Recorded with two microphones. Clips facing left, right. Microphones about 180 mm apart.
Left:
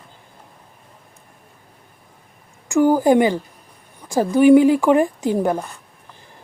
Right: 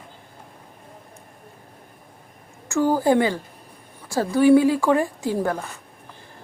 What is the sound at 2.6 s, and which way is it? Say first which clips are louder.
Speech: left 5 dB; 15° left (ahead or behind).